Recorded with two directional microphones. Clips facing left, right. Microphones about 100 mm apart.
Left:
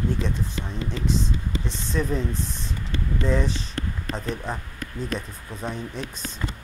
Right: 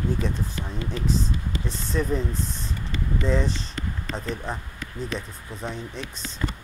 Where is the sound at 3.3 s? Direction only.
5° left (ahead or behind).